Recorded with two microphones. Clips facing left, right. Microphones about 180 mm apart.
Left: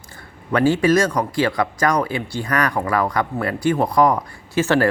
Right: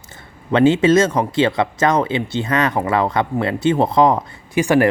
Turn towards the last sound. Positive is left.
turn(degrees=-15)  # may be behind; listen again after turning